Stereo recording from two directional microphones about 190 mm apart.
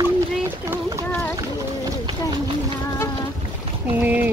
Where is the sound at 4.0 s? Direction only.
10° right (ahead or behind).